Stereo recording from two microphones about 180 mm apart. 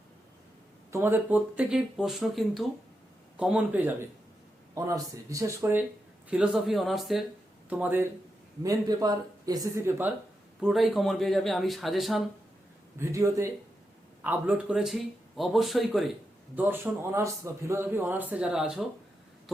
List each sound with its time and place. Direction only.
0.9 s a man's voice: 15° right (ahead or behind)
6.3 s a man's voice: 5° right (ahead or behind)
8.6 s speech: 20° right (ahead or behind)
10.6 s speech: centre (ahead or behind)
13.0 s a man's voice: 15° right (ahead or behind); by 16.1 s centre (ahead or behind)
16.6 s a man's voice: 10° right (ahead or behind)